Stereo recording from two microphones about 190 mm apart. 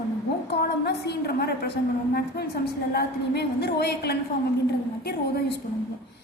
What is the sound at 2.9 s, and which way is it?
A woman's voice, 60° left (ahead or behind).